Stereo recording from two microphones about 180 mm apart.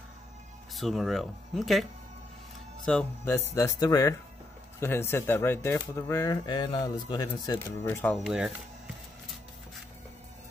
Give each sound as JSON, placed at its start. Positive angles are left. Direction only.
{"t": 0.7, "sound": "speech", "side_deg": 0}
{"t": 3.5, "sound": "speech", "side_deg": 15}